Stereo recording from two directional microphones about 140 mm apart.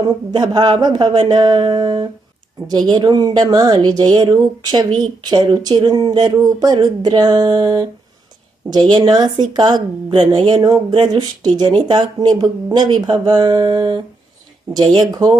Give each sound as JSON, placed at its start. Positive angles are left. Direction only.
{"t": 0.3, "sound": "speech", "side_deg": -30}
{"t": 15.1, "sound": "speech", "side_deg": -30}